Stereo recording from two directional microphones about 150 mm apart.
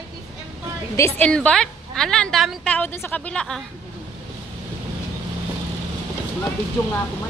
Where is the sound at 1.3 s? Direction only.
5° left (ahead or behind).